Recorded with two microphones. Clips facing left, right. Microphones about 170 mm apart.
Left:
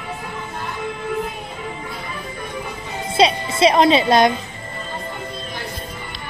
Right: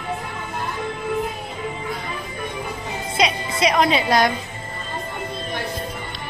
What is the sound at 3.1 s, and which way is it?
Music, 30° left (ahead or behind).